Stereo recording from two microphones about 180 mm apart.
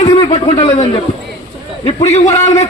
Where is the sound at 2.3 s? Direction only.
15° left (ahead or behind).